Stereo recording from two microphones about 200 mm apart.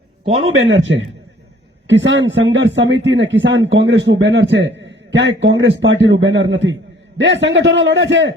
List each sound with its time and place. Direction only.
0.5 s a man's voice: 70° right (ahead or behind)
1.9 s speech: 65° right (ahead or behind)